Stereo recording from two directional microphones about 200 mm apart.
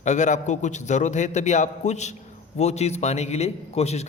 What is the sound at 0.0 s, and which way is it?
A man's voice, 35° left (ahead or behind).